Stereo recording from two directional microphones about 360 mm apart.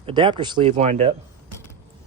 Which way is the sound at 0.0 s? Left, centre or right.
Centre.